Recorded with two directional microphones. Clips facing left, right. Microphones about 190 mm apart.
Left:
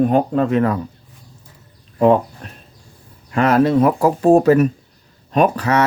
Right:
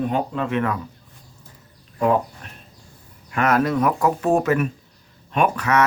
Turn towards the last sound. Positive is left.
turn(degrees=30)  # may be behind; listen again after turning